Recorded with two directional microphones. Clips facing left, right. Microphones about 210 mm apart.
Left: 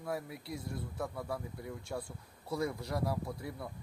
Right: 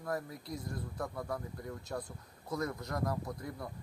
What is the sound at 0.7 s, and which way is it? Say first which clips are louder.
Speech: left 1 dB; 5° left (ahead or behind).